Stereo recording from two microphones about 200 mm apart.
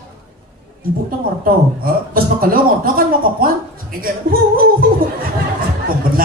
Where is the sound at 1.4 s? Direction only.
45° right (ahead or behind).